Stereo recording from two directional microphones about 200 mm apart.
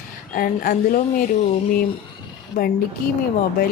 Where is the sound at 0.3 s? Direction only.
45° left (ahead or behind).